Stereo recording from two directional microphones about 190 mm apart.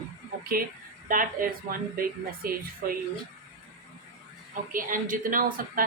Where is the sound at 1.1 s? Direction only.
45° right (ahead or behind).